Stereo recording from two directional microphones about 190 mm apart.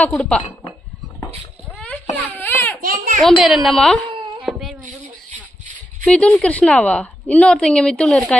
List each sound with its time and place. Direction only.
0.0 s a woman's voice: 5° left (ahead or behind)
2.1 s baby cry: 10° left (ahead or behind)
3.3 s a woman's voice: centre (ahead or behind)
4.1 s wail: 30° right (ahead or behind)
4.4 s wail: centre (ahead or behind)
4.8 s a sound: 45° right (ahead or behind)
6.0 s a woman's voice: 5° left (ahead or behind)